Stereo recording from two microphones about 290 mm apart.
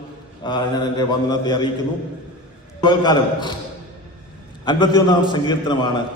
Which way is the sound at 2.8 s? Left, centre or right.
Centre.